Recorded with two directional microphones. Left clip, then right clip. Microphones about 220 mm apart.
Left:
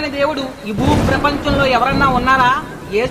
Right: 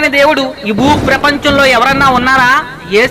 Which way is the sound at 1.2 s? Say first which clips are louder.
Right 7 dB; 20° right (ahead or behind).